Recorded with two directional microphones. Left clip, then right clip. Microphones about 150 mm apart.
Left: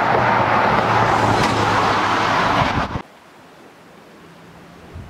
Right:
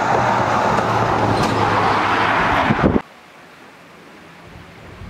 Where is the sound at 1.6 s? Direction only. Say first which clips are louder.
Right 1 dB; 35° left (ahead or behind).